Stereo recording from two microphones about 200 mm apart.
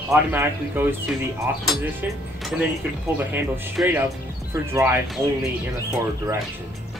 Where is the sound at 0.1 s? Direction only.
10° right (ahead or behind).